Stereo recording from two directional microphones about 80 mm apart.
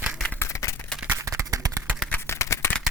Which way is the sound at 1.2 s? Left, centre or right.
Right.